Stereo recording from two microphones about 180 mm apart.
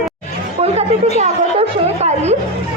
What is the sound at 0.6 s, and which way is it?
Chatter, 35° right (ahead or behind).